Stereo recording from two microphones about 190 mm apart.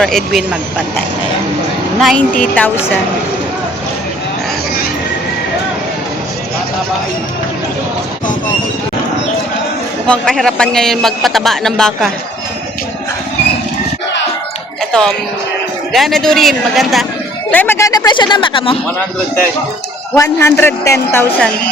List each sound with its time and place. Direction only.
0.0 s a man's voice: 5° left (ahead or behind)
2.0 s a man's voice: centre (ahead or behind)
10.1 s a man's voice: 5° left (ahead or behind)
14.9 s a man's voice: 5° left (ahead or behind); by 18.8 s 30° left (ahead or behind)
20.1 s a man's voice: 15° left (ahead or behind)